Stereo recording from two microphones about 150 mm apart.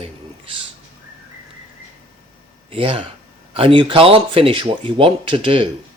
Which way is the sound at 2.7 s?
35° right (ahead or behind).